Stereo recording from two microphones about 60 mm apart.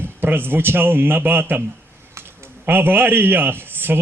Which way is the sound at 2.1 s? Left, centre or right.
Right.